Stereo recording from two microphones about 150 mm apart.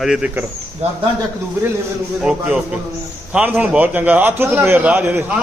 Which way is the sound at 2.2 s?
5° right (ahead or behind).